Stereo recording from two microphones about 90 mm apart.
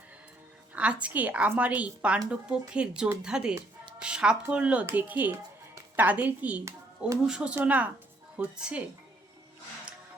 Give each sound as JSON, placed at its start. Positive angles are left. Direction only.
{"t": 0.7, "sound": "speech", "side_deg": -15}